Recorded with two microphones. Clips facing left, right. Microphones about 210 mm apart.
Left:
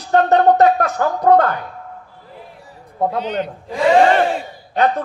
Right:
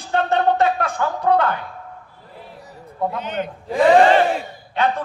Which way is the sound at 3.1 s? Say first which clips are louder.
Left 4 dB; 50° right (ahead or behind).